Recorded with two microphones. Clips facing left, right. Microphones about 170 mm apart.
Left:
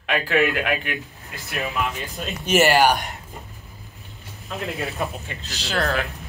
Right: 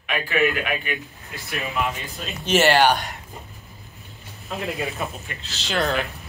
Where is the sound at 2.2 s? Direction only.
5° left (ahead or behind).